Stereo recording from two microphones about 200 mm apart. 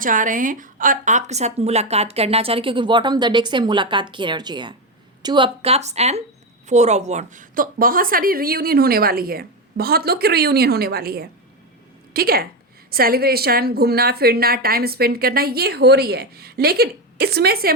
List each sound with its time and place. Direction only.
0.0 s a woman's voice: 40° right (ahead or behind)